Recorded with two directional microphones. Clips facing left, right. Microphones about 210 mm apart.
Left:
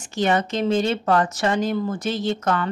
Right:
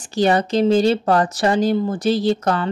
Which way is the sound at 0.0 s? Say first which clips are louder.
Right 4 dB; 35° right (ahead or behind).